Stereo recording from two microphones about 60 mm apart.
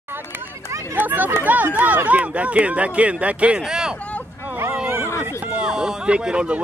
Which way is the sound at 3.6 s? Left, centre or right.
Centre.